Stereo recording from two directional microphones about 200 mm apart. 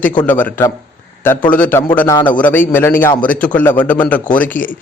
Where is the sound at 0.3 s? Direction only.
10° left (ahead or behind).